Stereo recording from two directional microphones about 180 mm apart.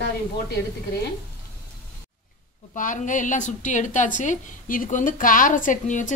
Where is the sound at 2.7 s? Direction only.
45° left (ahead or behind).